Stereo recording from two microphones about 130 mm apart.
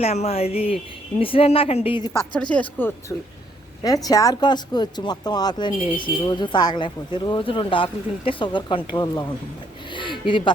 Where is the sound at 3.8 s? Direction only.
30° left (ahead or behind).